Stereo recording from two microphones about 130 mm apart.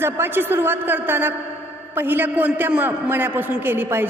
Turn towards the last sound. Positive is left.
turn(degrees=-15)  # may be behind; listen again after turning